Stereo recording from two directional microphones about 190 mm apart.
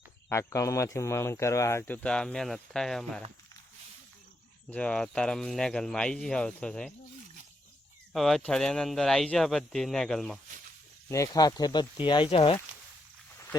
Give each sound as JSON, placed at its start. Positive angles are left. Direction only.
{"t": 0.3, "sound": "speech", "side_deg": 15}
{"t": 4.7, "sound": "speech", "side_deg": 5}
{"t": 8.1, "sound": "speech", "side_deg": 0}
{"t": 11.1, "sound": "speech", "side_deg": 20}
{"t": 13.3, "sound": "wild animals", "side_deg": 15}